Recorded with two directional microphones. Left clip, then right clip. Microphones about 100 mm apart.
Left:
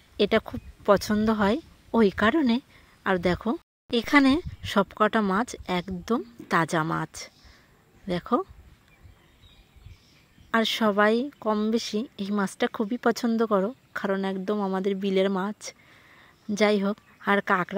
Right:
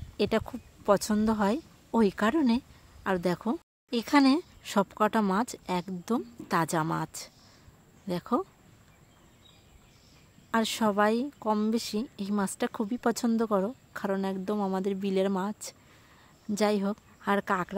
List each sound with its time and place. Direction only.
0.2 s speech: 25° left (ahead or behind)
10.5 s speech: 20° left (ahead or behind)